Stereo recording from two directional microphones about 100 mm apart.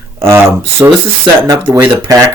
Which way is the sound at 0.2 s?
25° right (ahead or behind).